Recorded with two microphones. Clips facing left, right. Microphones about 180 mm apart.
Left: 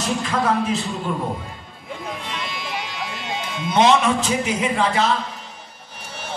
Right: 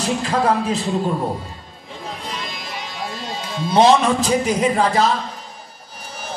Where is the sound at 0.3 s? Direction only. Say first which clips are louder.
Right 2 dB; 35° right (ahead or behind).